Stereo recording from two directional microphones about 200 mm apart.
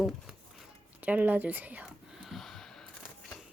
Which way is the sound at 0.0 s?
Centre (ahead or behind).